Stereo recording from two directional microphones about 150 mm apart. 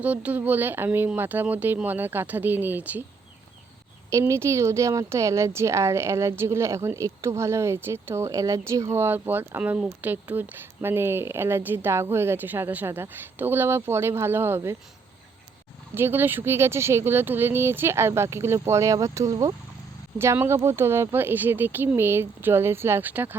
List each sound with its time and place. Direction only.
0.0 s speech: 10° right (ahead or behind)
4.1 s speech: 20° right (ahead or behind)
16.0 s speech: 15° right (ahead or behind)